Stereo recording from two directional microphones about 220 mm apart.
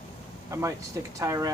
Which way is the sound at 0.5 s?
15° right (ahead or behind).